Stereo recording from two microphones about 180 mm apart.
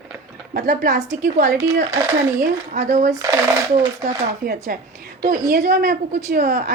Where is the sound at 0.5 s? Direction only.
50° right (ahead or behind).